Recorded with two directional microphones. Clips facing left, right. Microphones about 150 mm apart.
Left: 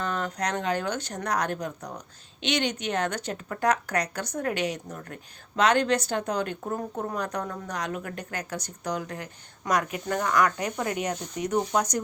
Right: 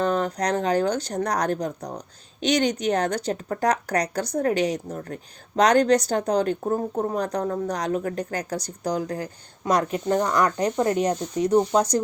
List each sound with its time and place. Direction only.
0.0 s speech: 35° right (ahead or behind)